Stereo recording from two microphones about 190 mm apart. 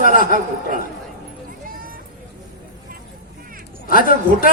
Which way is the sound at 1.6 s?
50° right (ahead or behind).